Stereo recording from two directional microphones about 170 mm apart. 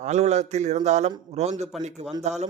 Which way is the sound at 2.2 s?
40° right (ahead or behind).